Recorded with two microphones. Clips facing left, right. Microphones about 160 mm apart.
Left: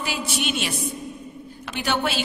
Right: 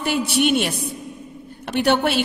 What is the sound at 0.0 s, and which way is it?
A woman's voice, 60° right (ahead or behind).